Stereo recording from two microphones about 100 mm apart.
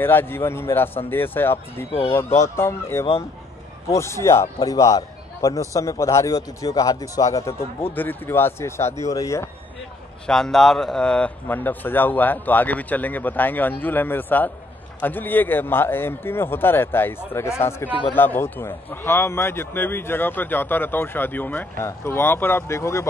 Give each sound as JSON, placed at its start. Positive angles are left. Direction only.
{"t": 0.0, "sound": "a man's voice", "side_deg": 20}
{"t": 7.9, "sound": "a man's voice", "side_deg": 20}
{"t": 10.2, "sound": "a man's voice", "side_deg": 5}